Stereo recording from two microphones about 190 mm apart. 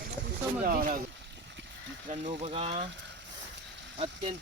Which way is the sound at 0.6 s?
50° right (ahead or behind).